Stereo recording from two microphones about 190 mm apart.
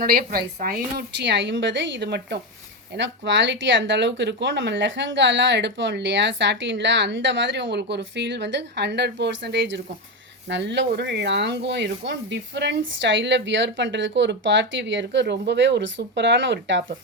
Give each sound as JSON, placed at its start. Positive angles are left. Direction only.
{"t": 0.0, "sound": "speech", "side_deg": -50}